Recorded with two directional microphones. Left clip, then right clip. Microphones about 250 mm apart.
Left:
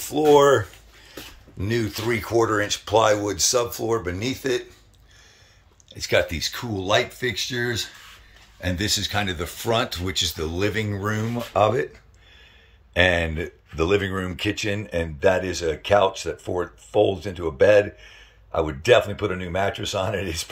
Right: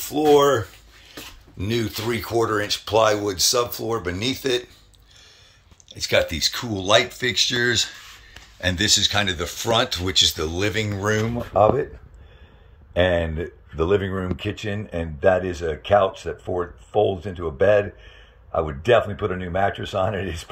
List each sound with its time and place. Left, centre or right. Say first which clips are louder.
0.0 s a sound: even; centre
1.6 s speech: even; centre
5.9 s speech: right 1 dB; centre
12.9 s speech: even; centre
17.3 s speech: left 1 dB; left